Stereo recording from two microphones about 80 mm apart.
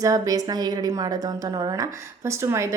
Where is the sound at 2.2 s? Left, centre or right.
Right.